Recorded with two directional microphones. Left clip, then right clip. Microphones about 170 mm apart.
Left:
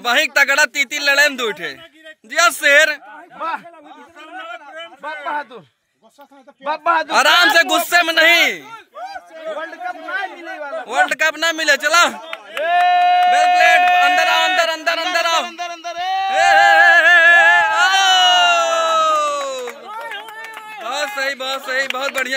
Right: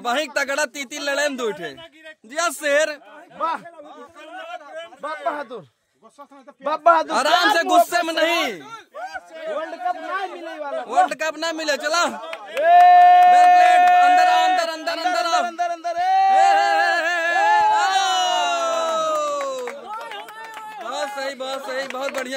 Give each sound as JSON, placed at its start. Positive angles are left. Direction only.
{"t": 0.0, "sound": "speech", "side_deg": -10}
{"t": 3.3, "sound": "speech", "side_deg": -75}
{"t": 5.0, "sound": "speech", "side_deg": -65}
{"t": 6.6, "sound": "speech", "side_deg": -65}
{"t": 7.1, "sound": "a man's voice", "side_deg": -5}
{"t": 10.9, "sound": "a man's voice", "side_deg": -5}
{"t": 12.5, "sound": "speech", "side_deg": -80}
{"t": 13.6, "sound": "a man's voice", "side_deg": 0}
{"t": 15.4, "sound": "speech", "side_deg": -55}
{"t": 16.3, "sound": "a sound", "side_deg": 0}
{"t": 20.1, "sound": "a sound", "side_deg": -20}
{"t": 20.8, "sound": "speech", "side_deg": 0}